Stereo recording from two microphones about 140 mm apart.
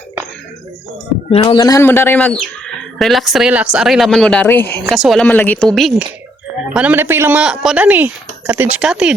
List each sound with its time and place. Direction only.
1.3 s speech: 45° left (ahead or behind)
1.5 s speech: 25° left (ahead or behind); by 4.4 s 5° left (ahead or behind)
4.4 s a woman's voice: 15° left (ahead or behind)
5.0 s speech: centre (ahead or behind)
5.3 s a woman's voice: 10° left (ahead or behind)
6.7 s speech: 15° right (ahead or behind)